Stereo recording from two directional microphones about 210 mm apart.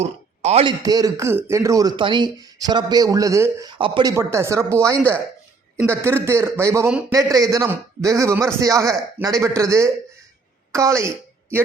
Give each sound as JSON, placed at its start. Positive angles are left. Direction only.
{"t": 0.0, "sound": "speech", "side_deg": -30}
{"t": 0.8, "sound": "a woman's voice", "side_deg": -15}